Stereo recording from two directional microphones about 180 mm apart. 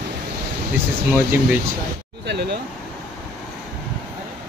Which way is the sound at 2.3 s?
70° right (ahead or behind).